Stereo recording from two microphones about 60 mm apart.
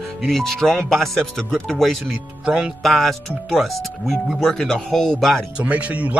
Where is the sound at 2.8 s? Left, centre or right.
Centre.